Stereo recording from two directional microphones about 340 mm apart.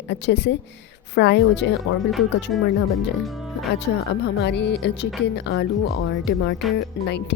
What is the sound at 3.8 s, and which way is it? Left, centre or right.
Speech, left.